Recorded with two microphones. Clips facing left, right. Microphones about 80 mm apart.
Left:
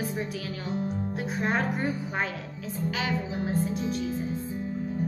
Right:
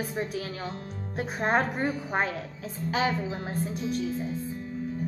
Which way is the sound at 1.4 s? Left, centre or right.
Right.